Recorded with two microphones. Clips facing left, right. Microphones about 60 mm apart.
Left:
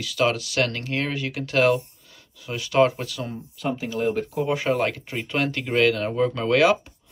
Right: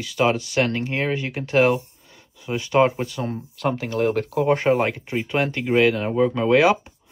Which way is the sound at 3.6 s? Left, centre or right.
Right.